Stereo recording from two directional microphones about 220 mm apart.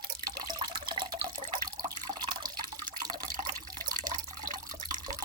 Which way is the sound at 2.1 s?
20° right (ahead or behind).